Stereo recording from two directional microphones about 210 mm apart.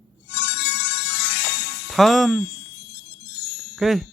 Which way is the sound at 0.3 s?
50° left (ahead or behind).